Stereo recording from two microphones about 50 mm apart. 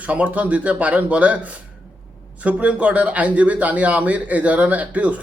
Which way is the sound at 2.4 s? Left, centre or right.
Right.